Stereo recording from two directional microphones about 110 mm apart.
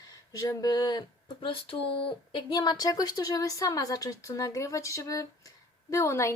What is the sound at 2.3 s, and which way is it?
A woman's voice, 40° left (ahead or behind).